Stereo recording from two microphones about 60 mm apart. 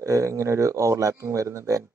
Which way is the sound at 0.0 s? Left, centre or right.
Right.